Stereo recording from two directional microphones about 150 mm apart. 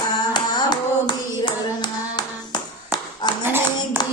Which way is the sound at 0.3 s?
30° left (ahead or behind).